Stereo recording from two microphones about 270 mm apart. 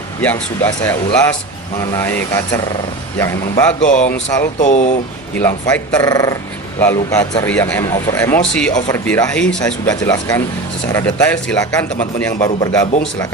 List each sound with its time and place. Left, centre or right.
0.2 s speech: centre
1.8 s speech: centre
3.8 s speech: left
4.1 s speech: centre
4.6 s speech: left
5.4 s speech: centre
12.5 s speech: centre